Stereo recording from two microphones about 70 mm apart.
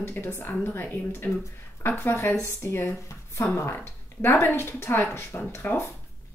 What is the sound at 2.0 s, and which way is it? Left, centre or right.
A woman's voice, left.